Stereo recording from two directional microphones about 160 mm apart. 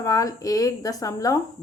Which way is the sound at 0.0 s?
20° left (ahead or behind).